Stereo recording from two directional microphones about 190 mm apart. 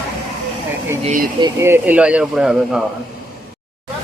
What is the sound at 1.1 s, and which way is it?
Speech, 45° right (ahead or behind).